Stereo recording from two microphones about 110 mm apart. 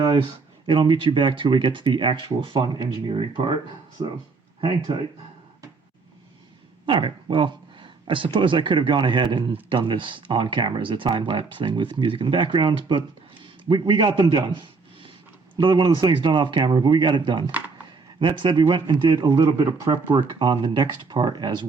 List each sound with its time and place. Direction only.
0.7 s speech: 45° right (ahead or behind)
4.6 s speech: 50° right (ahead or behind)
6.8 s speech: 50° right (ahead or behind)
15.5 s speech: 40° right (ahead or behind)
19.3 s speech: 30° right (ahead or behind)
20.1 s speech: 45° right (ahead or behind)